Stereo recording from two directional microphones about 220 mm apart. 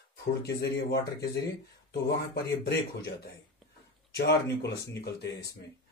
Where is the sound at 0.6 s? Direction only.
50° left (ahead or behind).